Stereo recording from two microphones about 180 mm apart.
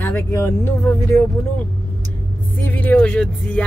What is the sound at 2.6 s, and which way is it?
Speech, 10° left (ahead or behind).